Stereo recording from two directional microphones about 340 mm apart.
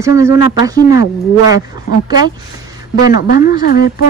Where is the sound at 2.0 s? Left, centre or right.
Centre.